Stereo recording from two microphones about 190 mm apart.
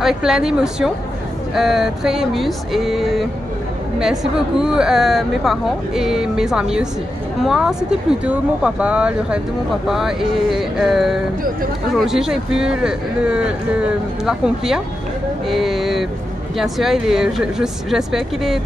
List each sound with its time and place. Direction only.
0.0 s speech: centre (ahead or behind)